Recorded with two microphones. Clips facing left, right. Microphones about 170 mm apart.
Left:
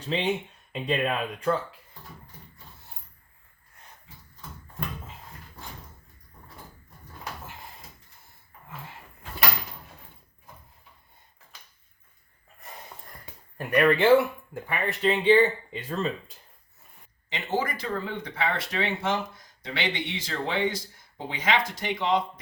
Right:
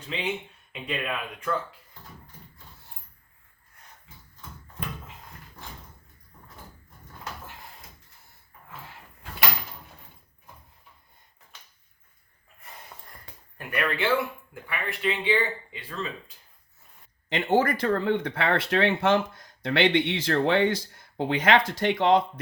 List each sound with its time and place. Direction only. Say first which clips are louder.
0.7 s speech: left 5 dB; 35° left (ahead or behind)
13.7 s speech: left 7 dB; 40° left (ahead or behind)
17.2 s speech: right 6 dB; 60° right (ahead or behind)